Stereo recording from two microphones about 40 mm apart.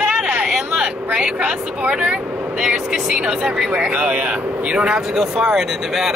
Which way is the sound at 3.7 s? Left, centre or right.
Right.